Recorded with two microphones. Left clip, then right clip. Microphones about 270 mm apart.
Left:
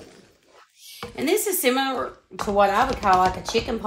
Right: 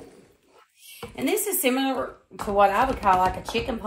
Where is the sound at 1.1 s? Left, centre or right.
Left.